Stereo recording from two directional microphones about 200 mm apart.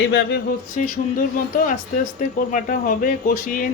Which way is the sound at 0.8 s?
40° left (ahead or behind).